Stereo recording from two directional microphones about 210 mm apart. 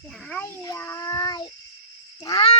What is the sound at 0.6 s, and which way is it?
Child singing, 15° left (ahead or behind).